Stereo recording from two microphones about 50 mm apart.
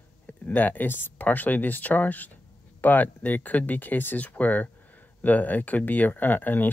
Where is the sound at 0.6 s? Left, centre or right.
Left.